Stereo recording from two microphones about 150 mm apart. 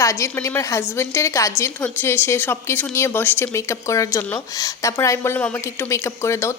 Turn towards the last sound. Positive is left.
turn(degrees=20)  # may be behind; listen again after turning